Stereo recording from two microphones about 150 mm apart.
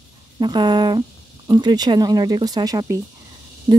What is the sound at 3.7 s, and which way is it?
Speech, 35° right (ahead or behind).